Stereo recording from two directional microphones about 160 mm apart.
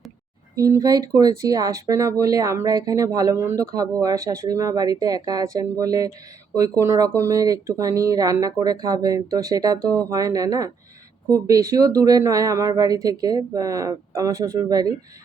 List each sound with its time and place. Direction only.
0.5 s speech: 20° right (ahead or behind)